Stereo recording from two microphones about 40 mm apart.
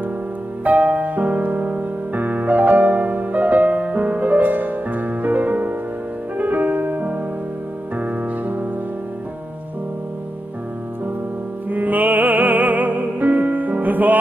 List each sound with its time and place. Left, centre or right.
0.7 s music: right
11.7 s music: right